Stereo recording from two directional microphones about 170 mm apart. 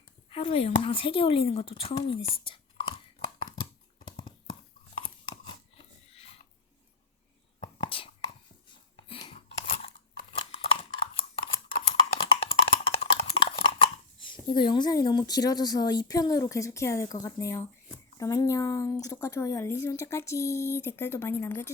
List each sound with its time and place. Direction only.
0.3 s speech: 30° left (ahead or behind)
3.3 s a sound: 30° left (ahead or behind)
7.6 s whispering: 30° left (ahead or behind)
9.0 s chewing: 30° left (ahead or behind)
10.3 s a sound: 30° left (ahead or behind)
11.7 s computer keyboard: 30° left (ahead or behind)
14.5 s a woman's voice: 25° left (ahead or behind)